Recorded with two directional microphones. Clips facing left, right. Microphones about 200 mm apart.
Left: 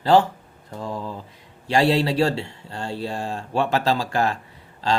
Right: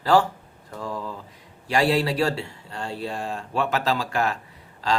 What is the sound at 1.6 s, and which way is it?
Speech, 25° left (ahead or behind).